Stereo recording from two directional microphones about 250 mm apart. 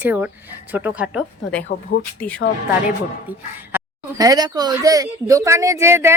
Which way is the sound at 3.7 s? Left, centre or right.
Centre.